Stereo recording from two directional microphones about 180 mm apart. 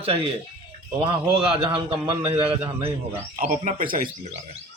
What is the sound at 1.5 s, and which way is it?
A man's voice, 30° right (ahead or behind).